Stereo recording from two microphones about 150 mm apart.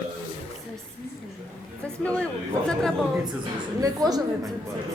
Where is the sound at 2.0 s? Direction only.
10° left (ahead or behind).